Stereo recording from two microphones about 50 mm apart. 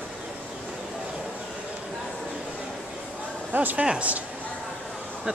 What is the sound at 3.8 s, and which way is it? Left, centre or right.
Speech, right.